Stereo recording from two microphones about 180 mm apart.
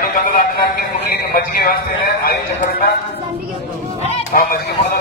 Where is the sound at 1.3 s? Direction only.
55° left (ahead or behind).